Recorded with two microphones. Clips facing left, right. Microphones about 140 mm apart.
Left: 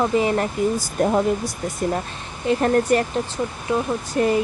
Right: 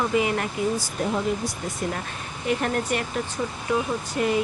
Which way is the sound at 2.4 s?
40° left (ahead or behind).